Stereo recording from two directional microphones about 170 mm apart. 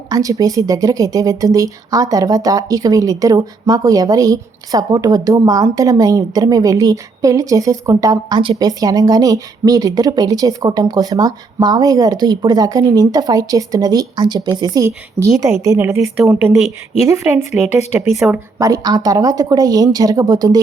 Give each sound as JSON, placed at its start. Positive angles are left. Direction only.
{"t": 0.1, "sound": "a woman's voice", "side_deg": -20}
{"t": 16.0, "sound": "a woman's voice", "side_deg": -5}
{"t": 18.1, "sound": "speech", "side_deg": 0}
{"t": 18.6, "sound": "speech", "side_deg": -20}